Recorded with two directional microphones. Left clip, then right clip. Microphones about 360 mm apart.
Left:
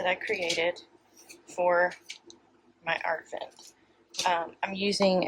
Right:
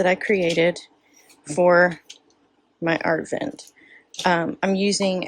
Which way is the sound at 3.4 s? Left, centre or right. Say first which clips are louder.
Right 11 dB; right.